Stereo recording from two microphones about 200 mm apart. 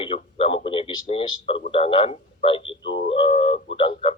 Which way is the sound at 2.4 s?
25° left (ahead or behind).